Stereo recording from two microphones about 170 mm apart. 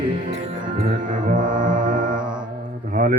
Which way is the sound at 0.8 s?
50° right (ahead or behind).